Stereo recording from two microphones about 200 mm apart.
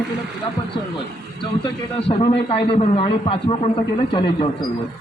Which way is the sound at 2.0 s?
30° left (ahead or behind).